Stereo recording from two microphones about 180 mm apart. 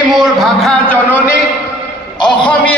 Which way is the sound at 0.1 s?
Centre (ahead or behind).